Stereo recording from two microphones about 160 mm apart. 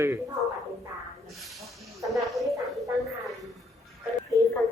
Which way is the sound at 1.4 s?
Centre (ahead or behind).